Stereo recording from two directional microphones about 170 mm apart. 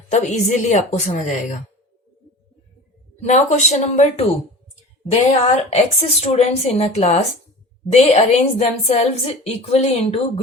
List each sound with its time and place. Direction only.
0.1 s a woman's voice: 45° left (ahead or behind)
3.2 s a woman's voice: 40° left (ahead or behind)
5.3 s a woman's voice: 40° left (ahead or behind)